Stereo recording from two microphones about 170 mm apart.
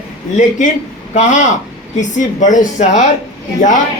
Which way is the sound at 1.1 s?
45° left (ahead or behind).